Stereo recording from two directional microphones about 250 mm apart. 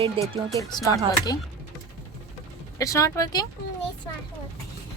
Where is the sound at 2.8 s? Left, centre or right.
Centre.